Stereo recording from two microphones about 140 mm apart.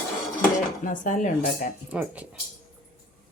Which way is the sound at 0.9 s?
65° left (ahead or behind).